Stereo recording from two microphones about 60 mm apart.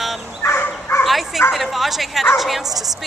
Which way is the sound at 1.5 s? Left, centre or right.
Centre.